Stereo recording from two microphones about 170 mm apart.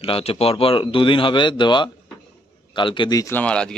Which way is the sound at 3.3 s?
5° left (ahead or behind).